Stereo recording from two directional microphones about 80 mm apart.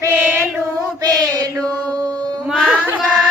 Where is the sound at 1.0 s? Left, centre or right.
Right.